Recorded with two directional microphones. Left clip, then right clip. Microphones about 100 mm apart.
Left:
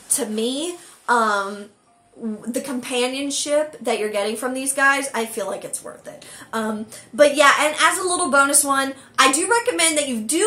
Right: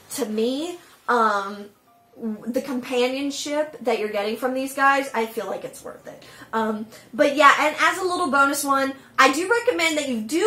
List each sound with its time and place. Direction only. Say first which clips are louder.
0.1 s speech: even; 5° left (ahead or behind)
1.0 s speech: left 1 dB; 15° left (ahead or behind)
2.5 s a woman's voice: even; 15° left (ahead or behind)
7.2 s a woman's voice: left 2 dB; 15° left (ahead or behind)